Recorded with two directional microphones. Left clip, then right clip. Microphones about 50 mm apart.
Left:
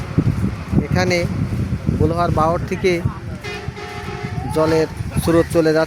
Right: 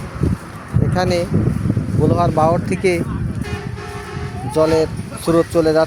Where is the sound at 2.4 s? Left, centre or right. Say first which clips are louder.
Right 2 dB; centre.